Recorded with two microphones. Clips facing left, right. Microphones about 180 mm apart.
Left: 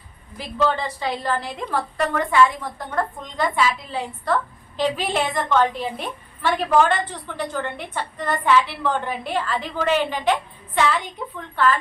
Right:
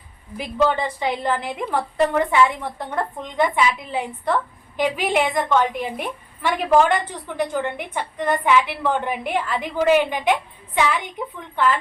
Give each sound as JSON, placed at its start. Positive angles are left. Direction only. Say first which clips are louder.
{"t": 0.3, "sound": "a woman's voice", "louder": "right 2 dB", "side_deg": -15}